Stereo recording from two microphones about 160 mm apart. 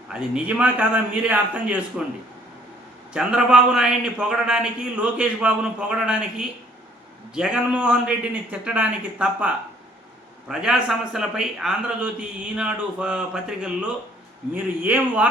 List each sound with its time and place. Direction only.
0.1 s a man's voice: 5° right (ahead or behind)
3.1 s a man's voice: 5° right (ahead or behind)
10.5 s a man's voice: 5° right (ahead or behind)